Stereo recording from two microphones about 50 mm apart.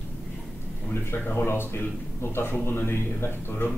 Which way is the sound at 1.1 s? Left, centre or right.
Left.